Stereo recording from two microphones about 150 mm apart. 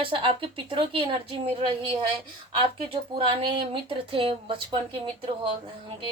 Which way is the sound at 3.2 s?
35° right (ahead or behind).